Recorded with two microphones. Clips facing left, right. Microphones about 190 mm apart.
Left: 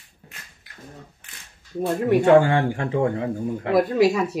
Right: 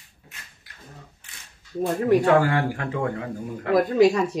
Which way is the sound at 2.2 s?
25° left (ahead or behind).